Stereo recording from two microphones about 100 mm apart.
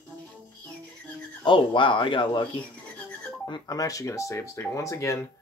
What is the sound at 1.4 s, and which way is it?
Speech, 55° left (ahead or behind).